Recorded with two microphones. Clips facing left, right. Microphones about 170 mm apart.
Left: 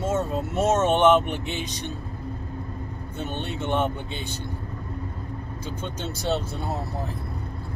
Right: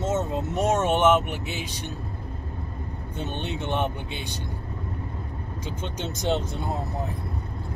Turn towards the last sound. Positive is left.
turn(degrees=-15)  # may be behind; listen again after turning